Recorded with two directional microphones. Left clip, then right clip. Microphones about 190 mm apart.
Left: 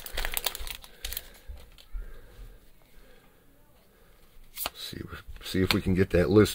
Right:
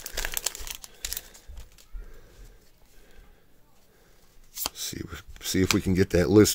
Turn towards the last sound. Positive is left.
turn(degrees=-35)  # may be behind; listen again after turning